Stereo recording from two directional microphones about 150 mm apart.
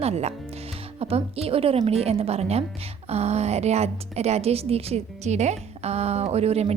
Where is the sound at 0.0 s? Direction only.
45° right (ahead or behind).